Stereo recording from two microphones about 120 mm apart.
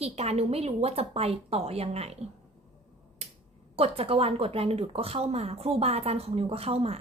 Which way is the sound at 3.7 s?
55° right (ahead or behind).